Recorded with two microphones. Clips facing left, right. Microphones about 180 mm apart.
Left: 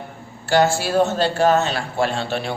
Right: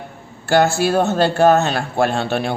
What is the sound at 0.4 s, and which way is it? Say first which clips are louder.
A man's voice: right 3 dB; 50° right (ahead or behind).